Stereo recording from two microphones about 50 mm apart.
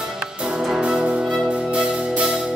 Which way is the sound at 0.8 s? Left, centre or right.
Centre.